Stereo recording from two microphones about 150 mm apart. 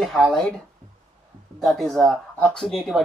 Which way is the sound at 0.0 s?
Centre (ahead or behind).